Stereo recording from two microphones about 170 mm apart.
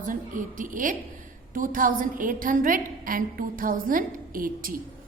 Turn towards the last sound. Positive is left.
turn(degrees=-55)  # may be behind; listen again after turning